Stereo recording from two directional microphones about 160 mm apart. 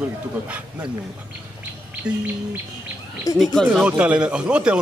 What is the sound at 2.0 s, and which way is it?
Speech, 5° right (ahead or behind).